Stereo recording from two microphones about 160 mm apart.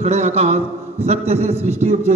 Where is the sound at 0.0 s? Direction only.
40° right (ahead or behind).